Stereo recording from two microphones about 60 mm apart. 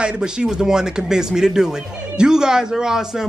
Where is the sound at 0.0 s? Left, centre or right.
Centre.